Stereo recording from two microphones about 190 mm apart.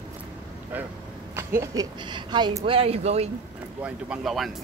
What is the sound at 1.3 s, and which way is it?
Speech, 15° right (ahead or behind).